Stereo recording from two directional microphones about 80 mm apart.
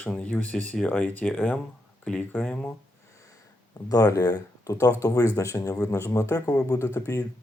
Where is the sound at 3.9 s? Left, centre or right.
Left.